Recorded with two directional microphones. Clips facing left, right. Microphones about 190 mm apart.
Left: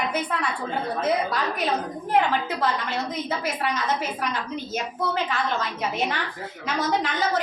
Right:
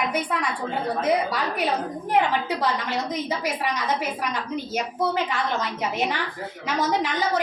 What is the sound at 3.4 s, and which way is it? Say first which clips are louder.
A woman's voice: even; 15° right (ahead or behind).